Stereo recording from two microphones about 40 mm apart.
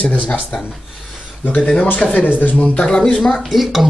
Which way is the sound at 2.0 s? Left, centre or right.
Left.